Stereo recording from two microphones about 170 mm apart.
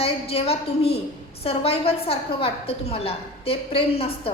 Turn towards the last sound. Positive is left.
turn(degrees=35)  # may be behind; listen again after turning